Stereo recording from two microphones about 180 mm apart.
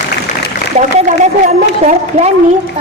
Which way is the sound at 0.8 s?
40° right (ahead or behind).